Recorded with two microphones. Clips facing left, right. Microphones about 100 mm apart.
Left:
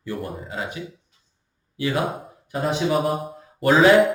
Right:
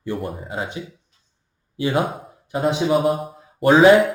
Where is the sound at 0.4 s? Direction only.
25° right (ahead or behind).